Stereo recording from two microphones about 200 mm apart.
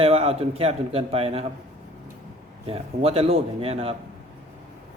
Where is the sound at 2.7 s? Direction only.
30° right (ahead or behind).